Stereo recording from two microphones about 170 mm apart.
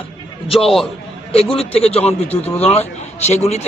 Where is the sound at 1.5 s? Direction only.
35° left (ahead or behind).